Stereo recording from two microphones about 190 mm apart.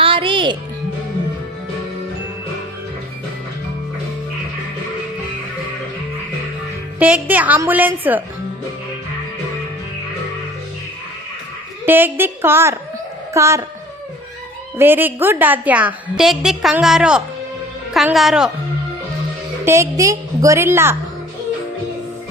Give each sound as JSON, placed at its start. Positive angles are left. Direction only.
{"t": 0.0, "sound": "music", "side_deg": -25}
{"t": 7.0, "sound": "a woman's voice", "side_deg": -10}
{"t": 11.9, "sound": "a woman's voice", "side_deg": -10}
{"t": 14.8, "sound": "a woman's voice", "side_deg": -10}
{"t": 19.6, "sound": "a woman's voice", "side_deg": -15}